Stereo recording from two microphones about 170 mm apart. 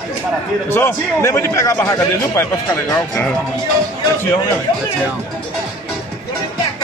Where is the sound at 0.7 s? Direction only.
15° left (ahead or behind).